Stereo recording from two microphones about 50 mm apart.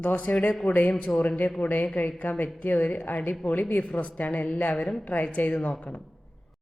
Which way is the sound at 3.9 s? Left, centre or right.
Left.